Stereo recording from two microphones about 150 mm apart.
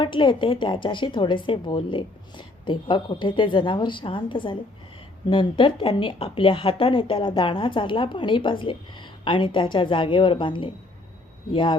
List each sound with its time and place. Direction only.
0.0 s a woman's voice: 30° left (ahead or behind)